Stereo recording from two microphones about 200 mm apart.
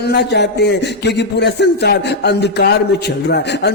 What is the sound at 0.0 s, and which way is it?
Speech, 55° left (ahead or behind).